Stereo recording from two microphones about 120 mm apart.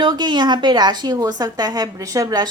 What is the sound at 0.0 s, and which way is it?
A woman's voice, 40° right (ahead or behind).